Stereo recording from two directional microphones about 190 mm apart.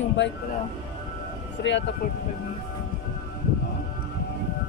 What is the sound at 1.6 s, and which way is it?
Speech, 75° left (ahead or behind).